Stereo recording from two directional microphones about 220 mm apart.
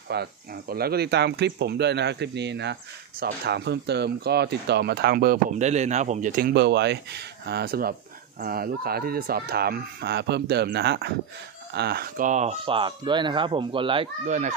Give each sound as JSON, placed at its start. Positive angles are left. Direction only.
{"t": 0.1, "sound": "speech", "side_deg": -45}